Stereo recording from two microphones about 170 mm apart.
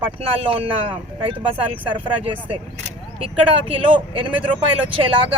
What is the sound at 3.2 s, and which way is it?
Speech, 30° right (ahead or behind).